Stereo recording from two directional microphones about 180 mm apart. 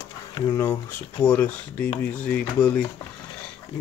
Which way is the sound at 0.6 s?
10° left (ahead or behind).